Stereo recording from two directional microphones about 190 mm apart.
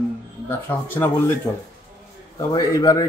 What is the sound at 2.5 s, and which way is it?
Speech, 20° left (ahead or behind).